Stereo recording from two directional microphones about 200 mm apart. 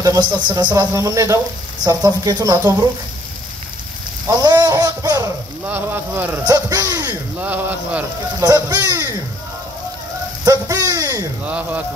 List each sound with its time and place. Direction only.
0.0 s speech: 15° right (ahead or behind)
4.3 s a man's voice: 20° right (ahead or behind)
10.4 s speech: 20° right (ahead or behind)
11.4 s speech: 5° right (ahead or behind)